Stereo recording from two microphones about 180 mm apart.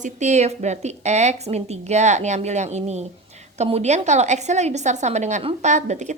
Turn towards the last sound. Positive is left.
turn(degrees=-40)  # may be behind; listen again after turning